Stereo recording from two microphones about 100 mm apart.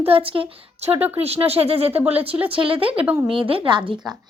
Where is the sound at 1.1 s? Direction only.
85° right.